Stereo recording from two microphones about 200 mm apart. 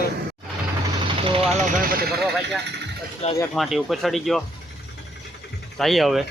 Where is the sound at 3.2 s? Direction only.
30° left (ahead or behind).